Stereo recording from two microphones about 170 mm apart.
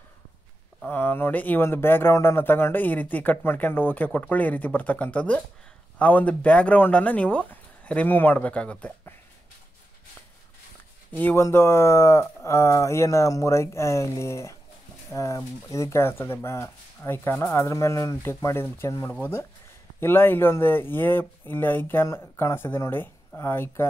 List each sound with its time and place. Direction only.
0.8 s speech: 10° left (ahead or behind)
11.1 s speech: 10° left (ahead or behind)